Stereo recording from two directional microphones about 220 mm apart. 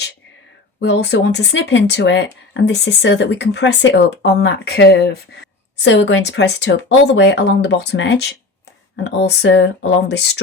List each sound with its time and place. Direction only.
0.8 s speech: 50° left (ahead or behind)